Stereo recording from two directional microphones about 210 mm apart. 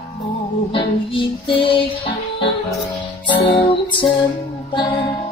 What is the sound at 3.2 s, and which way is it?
Music, 25° left (ahead or behind).